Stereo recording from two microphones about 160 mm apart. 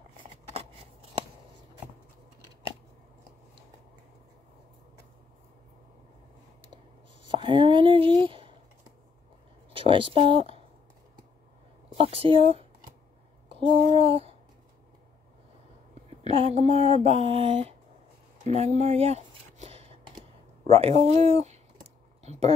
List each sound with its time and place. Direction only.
0.2 s scissors: 35° right (ahead or behind)
7.2 s speech: 30° right (ahead or behind)
9.7 s speech: 35° right (ahead or behind)
12.0 s mantra: 35° right (ahead or behind)
13.9 s mantra: 35° right (ahead or behind)
15.9 s a sound: 40° right (ahead or behind)
17.0 s mantra: 40° right (ahead or behind)
18.4 s a sound: 45° right (ahead or behind)